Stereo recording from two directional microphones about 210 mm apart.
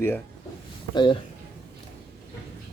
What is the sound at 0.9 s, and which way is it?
Speech, 25° left (ahead or behind).